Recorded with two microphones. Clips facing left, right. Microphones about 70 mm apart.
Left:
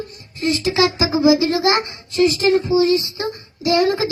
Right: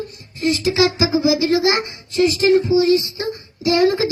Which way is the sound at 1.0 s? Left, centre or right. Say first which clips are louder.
Left 2 dB; left.